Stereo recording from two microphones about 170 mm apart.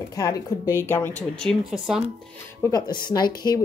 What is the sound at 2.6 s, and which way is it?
Speech, 20° left (ahead or behind).